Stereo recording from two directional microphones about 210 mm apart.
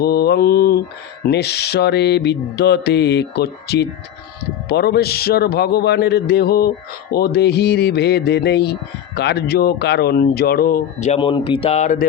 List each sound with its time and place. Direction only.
0.0 s a man's voice: 50° left (ahead or behind)
11.2 s speech: 25° left (ahead or behind)